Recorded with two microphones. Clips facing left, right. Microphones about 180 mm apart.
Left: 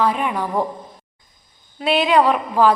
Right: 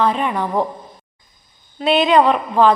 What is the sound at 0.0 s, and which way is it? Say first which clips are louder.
Speech: right 2 dB; 10° left (ahead or behind).